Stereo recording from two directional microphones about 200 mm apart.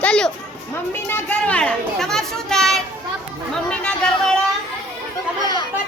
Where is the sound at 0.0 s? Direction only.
5° left (ahead or behind).